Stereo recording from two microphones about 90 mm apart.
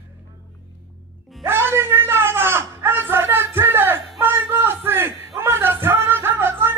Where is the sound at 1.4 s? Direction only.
25° right (ahead or behind).